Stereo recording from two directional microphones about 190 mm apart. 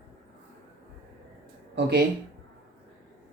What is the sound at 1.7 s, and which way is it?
Speech, 55° right (ahead or behind).